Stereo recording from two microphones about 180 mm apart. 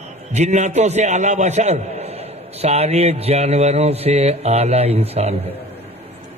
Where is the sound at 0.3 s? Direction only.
40° right (ahead or behind).